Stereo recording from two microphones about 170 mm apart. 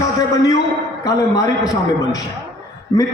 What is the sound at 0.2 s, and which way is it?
Speech, 20° left (ahead or behind).